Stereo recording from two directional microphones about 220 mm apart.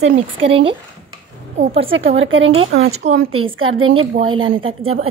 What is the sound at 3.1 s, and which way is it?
Speech, 75° right (ahead or behind).